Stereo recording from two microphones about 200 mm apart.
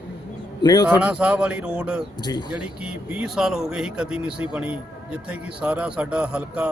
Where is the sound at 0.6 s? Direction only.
20° left (ahead or behind).